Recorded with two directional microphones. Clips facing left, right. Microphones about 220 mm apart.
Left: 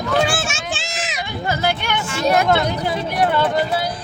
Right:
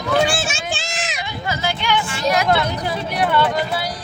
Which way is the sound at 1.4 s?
50° left (ahead or behind).